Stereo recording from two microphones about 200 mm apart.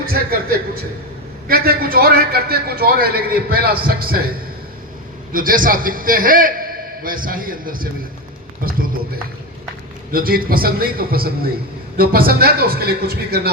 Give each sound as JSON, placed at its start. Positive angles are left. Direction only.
{"t": 0.0, "sound": "a man's voice", "side_deg": -50}
{"t": 5.3, "sound": "a man's voice", "side_deg": -45}
{"t": 10.1, "sound": "a man's voice", "side_deg": -45}